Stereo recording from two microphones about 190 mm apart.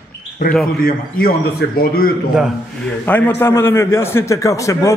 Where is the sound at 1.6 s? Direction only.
65° left (ahead or behind).